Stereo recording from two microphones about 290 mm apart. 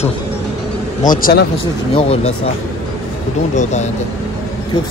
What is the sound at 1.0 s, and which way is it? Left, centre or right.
Speech, left.